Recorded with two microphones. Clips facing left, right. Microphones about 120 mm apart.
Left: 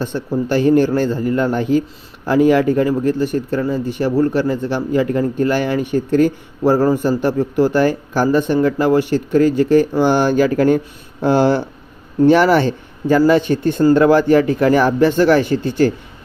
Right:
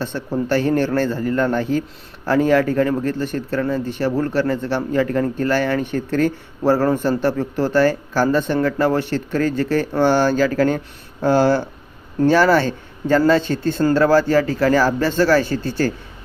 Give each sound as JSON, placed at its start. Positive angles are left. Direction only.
{"t": 0.0, "sound": "a man's voice", "side_deg": 15}